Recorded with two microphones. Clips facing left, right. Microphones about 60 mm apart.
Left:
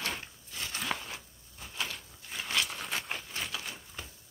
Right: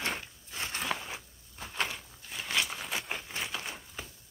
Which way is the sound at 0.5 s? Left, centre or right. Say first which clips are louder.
Right 2 dB; right.